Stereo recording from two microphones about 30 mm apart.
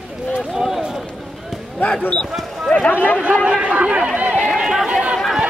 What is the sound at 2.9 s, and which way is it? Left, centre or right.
Speech, left.